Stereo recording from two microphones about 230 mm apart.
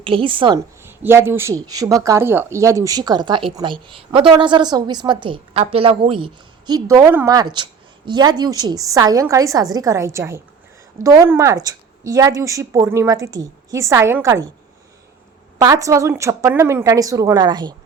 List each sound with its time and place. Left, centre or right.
0.0 s a woman's voice: right
15.5 s a woman's voice: centre